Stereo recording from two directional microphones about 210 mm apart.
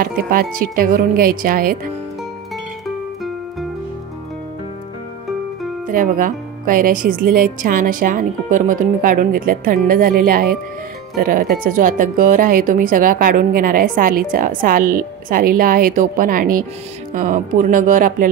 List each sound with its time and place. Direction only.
0.0 s speech: 45° right (ahead or behind)
5.9 s speech: 40° right (ahead or behind)